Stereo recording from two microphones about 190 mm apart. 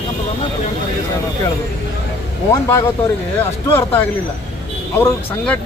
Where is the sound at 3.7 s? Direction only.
10° left (ahead or behind).